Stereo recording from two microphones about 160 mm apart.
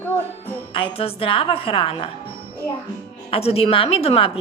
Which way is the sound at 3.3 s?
40° left (ahead or behind).